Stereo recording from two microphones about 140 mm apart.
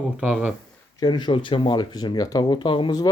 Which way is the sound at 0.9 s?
30° left (ahead or behind).